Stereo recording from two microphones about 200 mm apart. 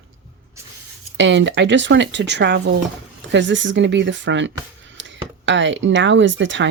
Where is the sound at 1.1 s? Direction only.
65° right (ahead or behind).